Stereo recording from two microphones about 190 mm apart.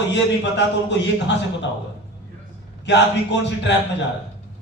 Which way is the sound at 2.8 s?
65° left (ahead or behind).